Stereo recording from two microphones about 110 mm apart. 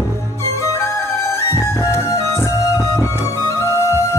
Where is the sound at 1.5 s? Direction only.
30° left (ahead or behind).